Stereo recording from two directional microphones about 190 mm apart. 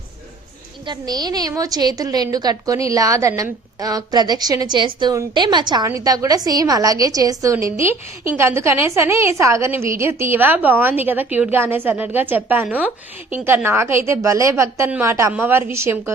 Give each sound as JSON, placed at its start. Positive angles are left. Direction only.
{"t": 0.9, "sound": "a woman's voice", "side_deg": -20}